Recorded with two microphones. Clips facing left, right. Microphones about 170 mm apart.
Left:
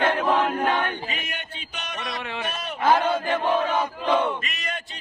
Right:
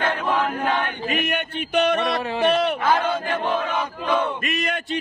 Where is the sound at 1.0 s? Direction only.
65° right (ahead or behind).